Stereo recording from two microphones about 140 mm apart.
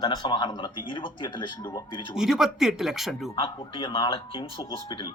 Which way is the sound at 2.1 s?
5° right (ahead or behind).